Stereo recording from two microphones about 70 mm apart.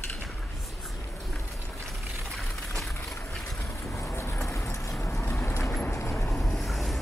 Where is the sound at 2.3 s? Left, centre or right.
Centre.